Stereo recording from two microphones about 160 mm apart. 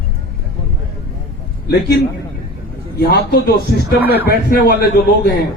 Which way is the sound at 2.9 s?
75° left (ahead or behind).